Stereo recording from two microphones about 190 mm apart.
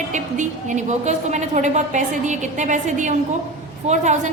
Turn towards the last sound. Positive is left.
turn(degrees=-40)  # may be behind; listen again after turning